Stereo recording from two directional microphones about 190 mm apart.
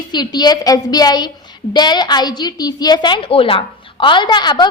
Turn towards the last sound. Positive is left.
turn(degrees=25)  # may be behind; listen again after turning